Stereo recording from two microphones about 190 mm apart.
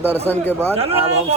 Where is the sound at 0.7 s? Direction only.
30° right (ahead or behind).